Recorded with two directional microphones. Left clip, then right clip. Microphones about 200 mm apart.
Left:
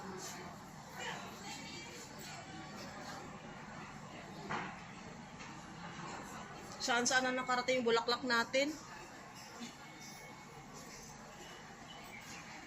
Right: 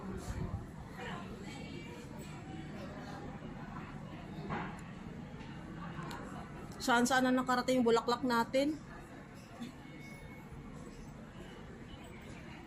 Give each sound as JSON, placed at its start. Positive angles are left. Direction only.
{"t": 6.7, "sound": "a woman's voice", "side_deg": -25}